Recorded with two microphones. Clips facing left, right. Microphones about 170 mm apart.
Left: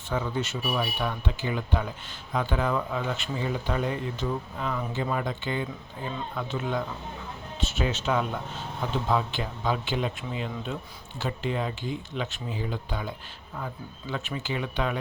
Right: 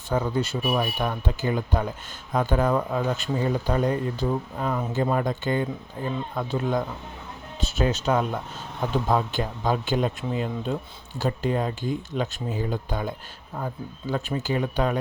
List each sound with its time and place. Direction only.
0.1 s speech: 40° right (ahead or behind)